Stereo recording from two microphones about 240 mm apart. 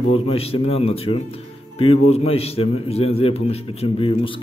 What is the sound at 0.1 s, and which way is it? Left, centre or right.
A man's voice, left.